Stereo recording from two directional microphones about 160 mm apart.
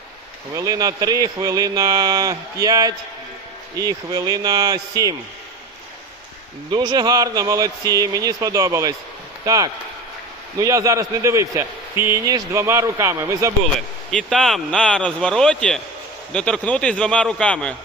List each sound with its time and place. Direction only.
0.5 s a man's voice: 20° right (ahead or behind)
6.7 s a man's voice: 25° right (ahead or behind)
13.6 s speech: 5° left (ahead or behind)